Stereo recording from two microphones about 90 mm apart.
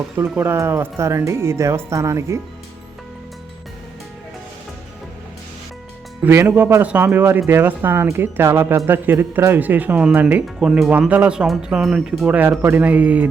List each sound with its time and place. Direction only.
0.3 s speech: 25° right (ahead or behind)
6.2 s speech: 30° right (ahead or behind)
6.8 s speech: 20° right (ahead or behind)
10.6 s speech: 5° right (ahead or behind)
12.3 s speech: 20° right (ahead or behind)